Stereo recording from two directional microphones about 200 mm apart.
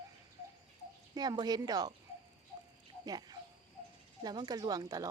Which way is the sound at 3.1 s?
20° right (ahead or behind).